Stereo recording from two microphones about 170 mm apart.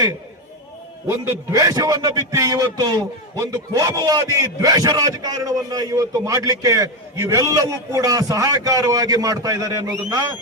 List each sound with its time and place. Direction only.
1.0 s a man's voice: 15° right (ahead or behind)